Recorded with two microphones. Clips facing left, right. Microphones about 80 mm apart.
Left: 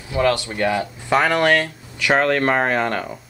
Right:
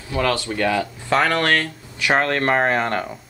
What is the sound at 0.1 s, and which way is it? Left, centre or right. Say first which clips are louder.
Speech: left 2 dB; left.